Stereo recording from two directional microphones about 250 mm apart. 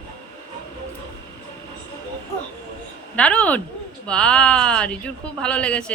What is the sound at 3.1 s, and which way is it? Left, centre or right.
Speech, centre.